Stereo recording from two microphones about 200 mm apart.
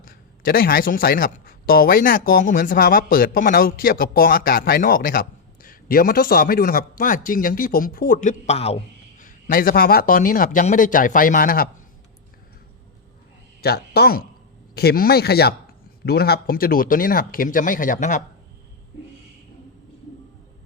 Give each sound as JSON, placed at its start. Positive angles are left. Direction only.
{"t": 0.0, "sound": "speech", "side_deg": 45}
{"t": 13.6, "sound": "speech", "side_deg": 50}